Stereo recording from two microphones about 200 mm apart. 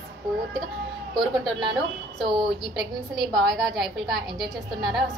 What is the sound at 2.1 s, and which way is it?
A woman's voice, centre (ahead or behind).